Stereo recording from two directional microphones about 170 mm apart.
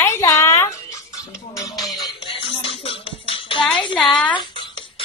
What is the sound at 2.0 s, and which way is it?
Music, 30° left (ahead or behind).